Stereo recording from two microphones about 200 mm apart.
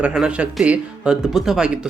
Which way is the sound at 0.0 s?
5° right (ahead or behind).